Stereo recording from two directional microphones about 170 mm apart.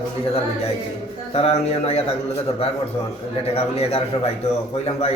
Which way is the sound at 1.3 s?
35° left (ahead or behind).